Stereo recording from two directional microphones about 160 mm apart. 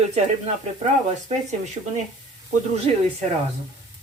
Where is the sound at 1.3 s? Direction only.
45° right (ahead or behind).